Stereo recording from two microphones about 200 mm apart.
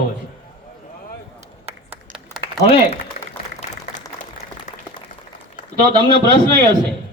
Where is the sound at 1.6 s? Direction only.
5° right (ahead or behind).